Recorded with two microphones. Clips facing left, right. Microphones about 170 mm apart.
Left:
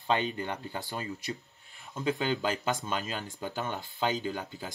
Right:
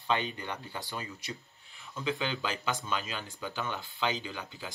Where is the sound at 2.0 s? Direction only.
45° left (ahead or behind).